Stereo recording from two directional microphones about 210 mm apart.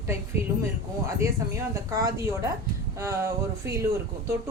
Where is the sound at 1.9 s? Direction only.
15° right (ahead or behind).